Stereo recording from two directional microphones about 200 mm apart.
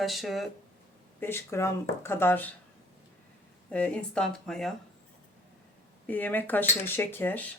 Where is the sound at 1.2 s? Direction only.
10° left (ahead or behind).